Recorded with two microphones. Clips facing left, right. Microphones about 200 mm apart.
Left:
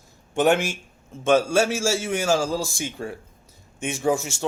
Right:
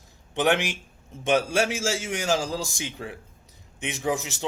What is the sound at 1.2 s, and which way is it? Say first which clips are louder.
Speech: left 4 dB; 15° right (ahead or behind).